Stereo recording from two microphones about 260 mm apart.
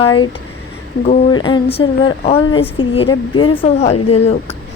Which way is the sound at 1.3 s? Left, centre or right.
Centre.